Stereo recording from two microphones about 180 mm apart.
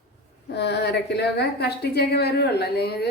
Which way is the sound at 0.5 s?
70° left (ahead or behind).